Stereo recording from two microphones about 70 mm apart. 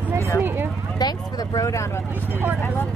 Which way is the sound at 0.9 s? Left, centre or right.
Left.